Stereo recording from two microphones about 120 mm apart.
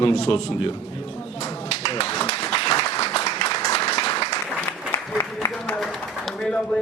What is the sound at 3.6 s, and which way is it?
Applause, 55° left (ahead or behind).